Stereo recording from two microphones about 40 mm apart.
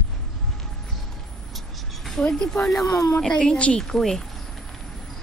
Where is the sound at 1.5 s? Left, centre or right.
Centre.